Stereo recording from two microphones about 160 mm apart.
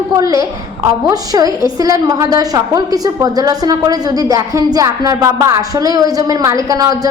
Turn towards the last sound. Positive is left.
turn(degrees=-20)  # may be behind; listen again after turning